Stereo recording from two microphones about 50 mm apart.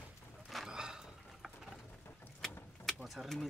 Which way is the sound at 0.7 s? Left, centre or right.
Centre.